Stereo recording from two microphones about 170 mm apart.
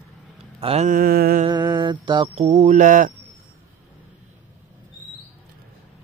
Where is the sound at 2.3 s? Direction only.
40° right (ahead or behind).